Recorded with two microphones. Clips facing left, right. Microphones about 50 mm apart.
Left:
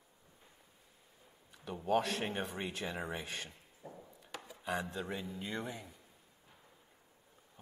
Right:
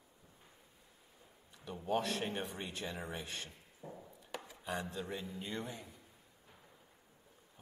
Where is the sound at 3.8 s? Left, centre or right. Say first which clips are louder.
Right 1 dB; centre.